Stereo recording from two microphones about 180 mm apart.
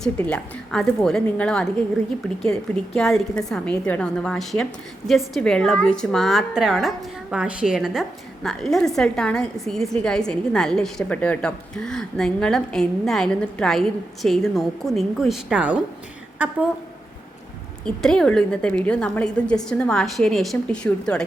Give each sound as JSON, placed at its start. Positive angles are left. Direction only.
{"t": 0.0, "sound": "a woman's voice", "side_deg": 5}
{"t": 17.8, "sound": "a woman's voice", "side_deg": 5}